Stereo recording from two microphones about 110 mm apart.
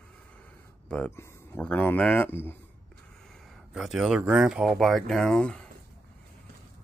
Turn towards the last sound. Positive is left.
turn(degrees=5)  # may be behind; listen again after turning